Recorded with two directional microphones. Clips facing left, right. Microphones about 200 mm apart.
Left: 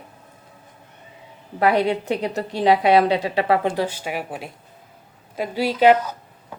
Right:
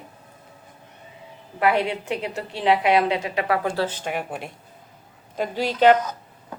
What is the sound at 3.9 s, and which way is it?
A woman's voice, 10° left (ahead or behind).